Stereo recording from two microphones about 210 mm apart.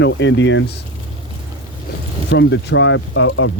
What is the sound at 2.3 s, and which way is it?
Speech, 60° left (ahead or behind).